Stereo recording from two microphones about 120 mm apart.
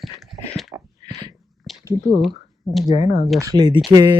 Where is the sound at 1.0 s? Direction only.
35° right (ahead or behind).